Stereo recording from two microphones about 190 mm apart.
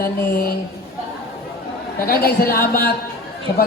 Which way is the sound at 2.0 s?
50° left (ahead or behind).